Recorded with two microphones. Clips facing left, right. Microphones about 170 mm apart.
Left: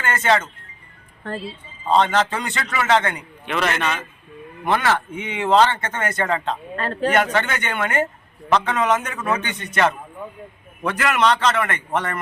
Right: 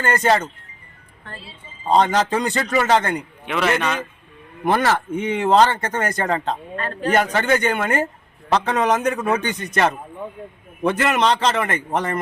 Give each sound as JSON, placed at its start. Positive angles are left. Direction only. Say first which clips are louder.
{"t": 0.0, "sound": "speech", "louder": "right 2 dB", "side_deg": -35}
{"t": 2.0, "sound": "speech", "louder": "right 2 dB", "side_deg": -35}
{"t": 3.4, "sound": "a man's voice", "louder": "right 1 dB", "side_deg": -10}
{"t": 4.6, "sound": "speech", "louder": "right 2 dB", "side_deg": -40}
{"t": 10.8, "sound": "speech", "louder": "right 1 dB", "side_deg": -30}